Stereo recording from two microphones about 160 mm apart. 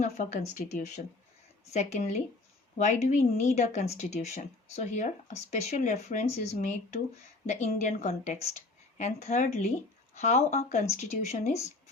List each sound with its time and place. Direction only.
0.0 s speech: 50° left (ahead or behind)
1.7 s speech: 45° left (ahead or behind)